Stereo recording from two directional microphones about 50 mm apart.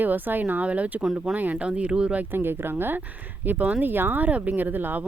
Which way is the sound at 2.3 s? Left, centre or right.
Right.